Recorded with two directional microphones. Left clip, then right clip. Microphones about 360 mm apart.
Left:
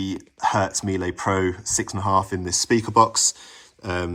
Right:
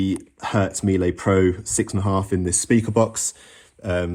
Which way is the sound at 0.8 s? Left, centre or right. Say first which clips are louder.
Right 3 dB; centre.